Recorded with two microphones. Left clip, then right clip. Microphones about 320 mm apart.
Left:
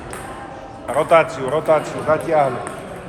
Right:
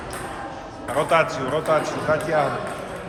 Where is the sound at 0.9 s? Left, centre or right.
Left.